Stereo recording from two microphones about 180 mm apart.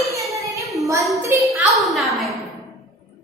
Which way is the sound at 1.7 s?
Centre (ahead or behind).